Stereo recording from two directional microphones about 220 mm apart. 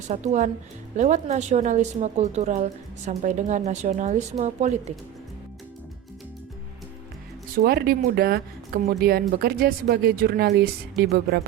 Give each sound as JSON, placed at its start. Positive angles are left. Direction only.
{"t": 0.1, "sound": "speech", "side_deg": -35}
{"t": 7.5, "sound": "speech", "side_deg": -45}